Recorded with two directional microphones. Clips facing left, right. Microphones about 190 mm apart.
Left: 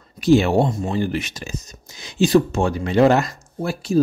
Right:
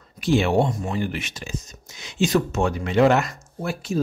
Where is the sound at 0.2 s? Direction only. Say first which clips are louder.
Left 4 dB; 40° left (ahead or behind).